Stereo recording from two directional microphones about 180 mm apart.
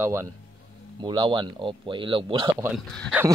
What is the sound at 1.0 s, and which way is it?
Speech, 25° right (ahead or behind).